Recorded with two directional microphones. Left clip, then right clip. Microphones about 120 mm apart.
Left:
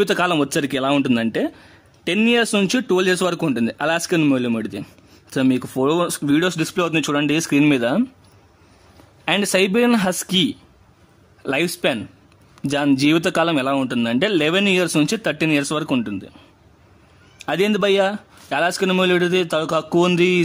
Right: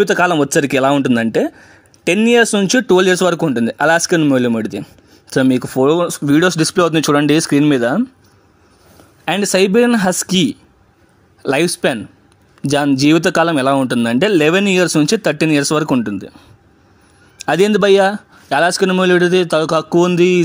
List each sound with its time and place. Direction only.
0.0 s speech: 20° right (ahead or behind)
0.7 s speech: 45° right (ahead or behind)
1.0 s speech: 35° right (ahead or behind)
7.7 s speech: 25° right (ahead or behind)
9.2 s speech: 25° right (ahead or behind); by 16.3 s 45° right (ahead or behind)
17.4 s speech: 40° right (ahead or behind)